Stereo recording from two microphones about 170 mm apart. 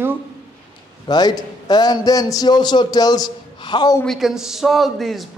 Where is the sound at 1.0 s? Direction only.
25° left (ahead or behind).